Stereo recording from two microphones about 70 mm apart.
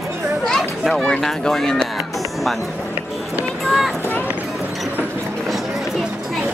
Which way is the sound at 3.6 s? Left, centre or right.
Centre.